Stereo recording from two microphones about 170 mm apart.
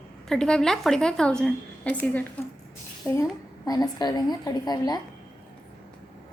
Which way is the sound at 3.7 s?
20° left (ahead or behind).